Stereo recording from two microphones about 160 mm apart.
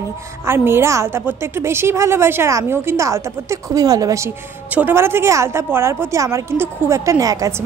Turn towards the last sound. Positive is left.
turn(degrees=-20)  # may be behind; listen again after turning